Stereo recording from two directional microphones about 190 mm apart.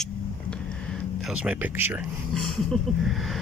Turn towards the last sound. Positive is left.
turn(degrees=0)  # may be behind; listen again after turning